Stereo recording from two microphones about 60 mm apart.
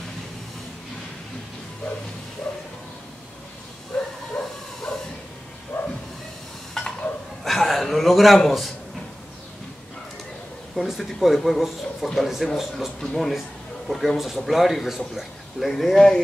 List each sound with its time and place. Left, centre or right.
3.9 s bow-wow: centre
5.7 s bow-wow: left
6.8 s stir: centre
7.4 s a sound: centre
8.4 s speech: centre
10.8 s speech: centre